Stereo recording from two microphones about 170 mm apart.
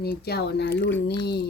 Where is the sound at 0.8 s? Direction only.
10° left (ahead or behind).